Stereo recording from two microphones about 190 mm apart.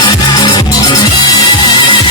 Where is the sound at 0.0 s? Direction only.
25° left (ahead or behind).